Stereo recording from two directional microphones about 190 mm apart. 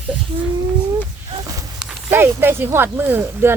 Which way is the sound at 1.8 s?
5° right (ahead or behind).